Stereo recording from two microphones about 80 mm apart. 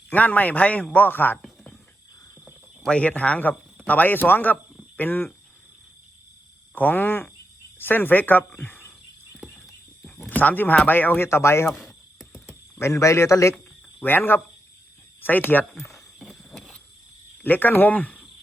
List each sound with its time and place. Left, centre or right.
0.1 s a man's voice: left
2.9 s a man's voice: centre
6.7 s a man's voice: left
10.2 s a man's voice: left
11.9 s a sound: left
14.0 s a man's voice: left
15.9 s a sound: centre
17.4 s a man's voice: left